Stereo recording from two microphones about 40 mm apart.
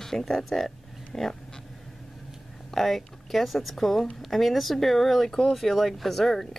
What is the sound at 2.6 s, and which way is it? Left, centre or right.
Speech, centre.